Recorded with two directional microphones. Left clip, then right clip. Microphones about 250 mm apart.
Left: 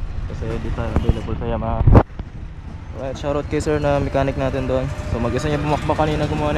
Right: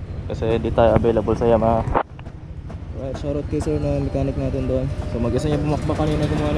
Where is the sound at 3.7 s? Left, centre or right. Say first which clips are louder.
Left 5 dB; centre.